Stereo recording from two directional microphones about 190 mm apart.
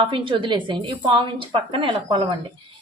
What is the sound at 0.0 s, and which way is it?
Speech, 25° right (ahead or behind).